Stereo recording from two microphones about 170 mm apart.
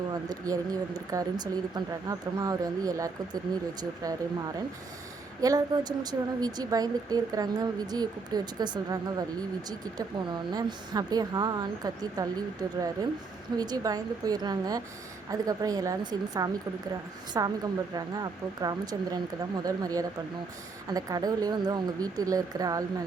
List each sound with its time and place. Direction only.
0.1 s a woman's voice: 20° right (ahead or behind)
13.6 s a woman's voice: 20° right (ahead or behind)